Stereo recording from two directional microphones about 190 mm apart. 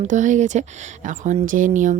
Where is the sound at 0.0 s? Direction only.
40° right (ahead or behind).